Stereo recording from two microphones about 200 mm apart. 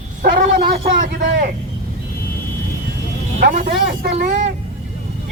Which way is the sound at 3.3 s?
40° right (ahead or behind).